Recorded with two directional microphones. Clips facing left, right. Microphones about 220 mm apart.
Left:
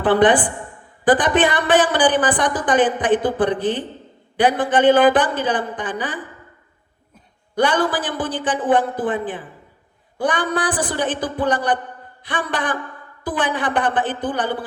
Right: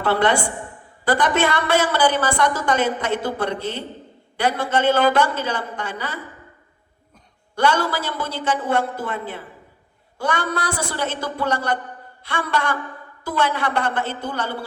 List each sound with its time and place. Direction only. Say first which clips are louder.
0.0 s a woman's voice: left 5 dB; 15° left (ahead or behind)
7.5 s a woman's voice: left 2 dB; 15° left (ahead or behind)